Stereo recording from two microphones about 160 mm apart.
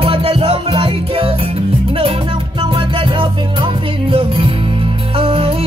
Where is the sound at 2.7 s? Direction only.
35° right (ahead or behind).